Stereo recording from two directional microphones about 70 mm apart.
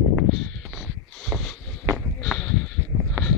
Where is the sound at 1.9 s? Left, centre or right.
Right.